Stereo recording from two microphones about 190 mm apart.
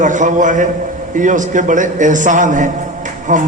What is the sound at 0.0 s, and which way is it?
A man's voice, 40° right (ahead or behind).